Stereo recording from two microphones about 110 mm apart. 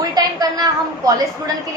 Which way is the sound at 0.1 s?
35° right (ahead or behind).